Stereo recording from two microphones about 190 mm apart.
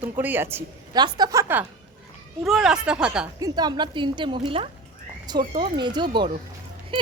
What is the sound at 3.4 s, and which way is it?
A woman's voice, 20° right (ahead or behind).